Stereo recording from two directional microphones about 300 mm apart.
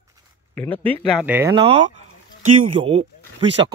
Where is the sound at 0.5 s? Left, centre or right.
Centre.